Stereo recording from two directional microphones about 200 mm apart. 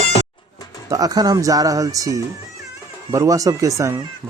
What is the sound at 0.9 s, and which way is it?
Speech, 20° right (ahead or behind).